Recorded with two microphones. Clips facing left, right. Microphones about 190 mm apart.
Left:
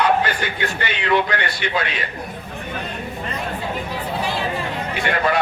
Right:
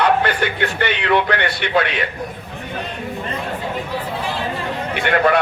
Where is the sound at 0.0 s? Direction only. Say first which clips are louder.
Right 2 dB; 60° right (ahead or behind).